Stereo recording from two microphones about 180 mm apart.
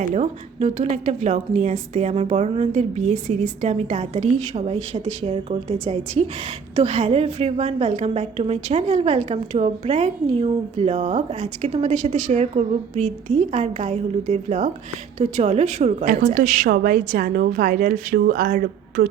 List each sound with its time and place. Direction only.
0.1 s a woman's voice: 40° right (ahead or behind)